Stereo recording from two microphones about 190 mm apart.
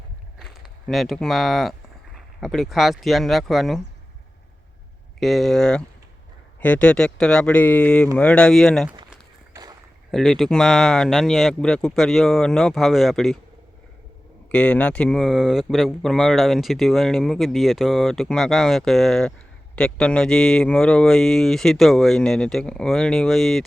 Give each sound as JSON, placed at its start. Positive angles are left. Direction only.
{"t": 0.3, "sound": "speech", "side_deg": 0}
{"t": 5.2, "sound": "speech", "side_deg": 0}
{"t": 9.0, "sound": "walk", "side_deg": -15}
{"t": 10.1, "sound": "speech", "side_deg": 0}
{"t": 14.5, "sound": "speech", "side_deg": 5}